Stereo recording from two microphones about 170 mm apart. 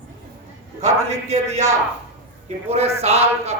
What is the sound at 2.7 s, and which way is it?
Speech, 40° right (ahead or behind).